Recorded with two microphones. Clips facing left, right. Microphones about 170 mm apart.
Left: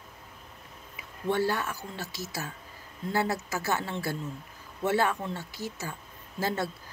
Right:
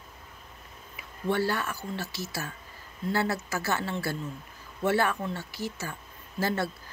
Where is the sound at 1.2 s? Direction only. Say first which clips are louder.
Even; 20° left (ahead or behind).